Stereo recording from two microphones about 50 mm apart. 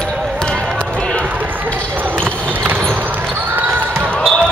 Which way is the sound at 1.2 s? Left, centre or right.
Right.